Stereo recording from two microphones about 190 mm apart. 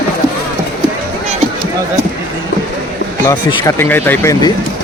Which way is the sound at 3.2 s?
20° left (ahead or behind).